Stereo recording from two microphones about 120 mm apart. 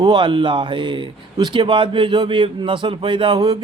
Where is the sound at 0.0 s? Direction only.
40° right (ahead or behind).